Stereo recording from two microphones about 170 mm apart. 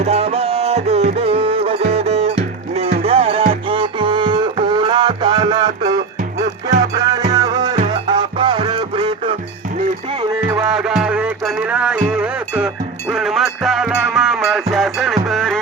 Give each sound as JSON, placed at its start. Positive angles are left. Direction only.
{"t": 0.0, "sound": "music", "side_deg": -40}
{"t": 10.5, "sound": "music", "side_deg": -5}